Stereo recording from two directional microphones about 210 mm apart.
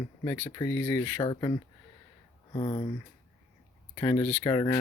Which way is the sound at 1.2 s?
20° left (ahead or behind).